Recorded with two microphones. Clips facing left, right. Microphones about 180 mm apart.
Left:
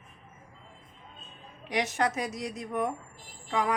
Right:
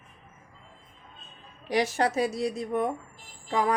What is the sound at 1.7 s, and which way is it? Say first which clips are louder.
A woman's voice: right 3 dB; 35° right (ahead or behind).